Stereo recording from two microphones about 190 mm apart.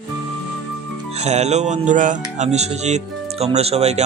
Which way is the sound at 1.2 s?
35° right (ahead or behind).